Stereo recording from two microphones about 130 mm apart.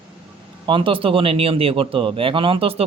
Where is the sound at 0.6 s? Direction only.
40° right (ahead or behind).